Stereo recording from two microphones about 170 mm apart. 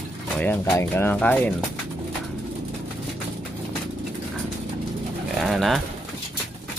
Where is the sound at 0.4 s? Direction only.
10° left (ahead or behind).